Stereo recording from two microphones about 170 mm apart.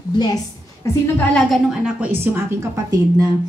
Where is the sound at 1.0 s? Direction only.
5° left (ahead or behind); by 3.3 s 20° right (ahead or behind).